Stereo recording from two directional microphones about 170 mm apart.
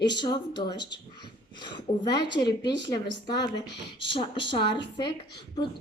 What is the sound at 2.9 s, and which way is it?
Speech, 25° left (ahead or behind).